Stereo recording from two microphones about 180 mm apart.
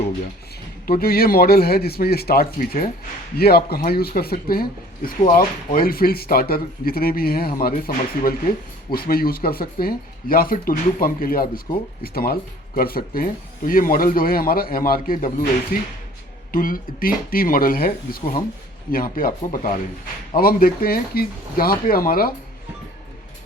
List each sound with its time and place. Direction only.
0.9 s a man's voice: 55° left (ahead or behind)